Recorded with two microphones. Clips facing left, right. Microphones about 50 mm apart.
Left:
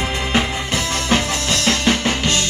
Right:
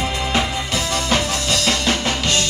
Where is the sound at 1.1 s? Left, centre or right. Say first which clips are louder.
Left 2 dB; left.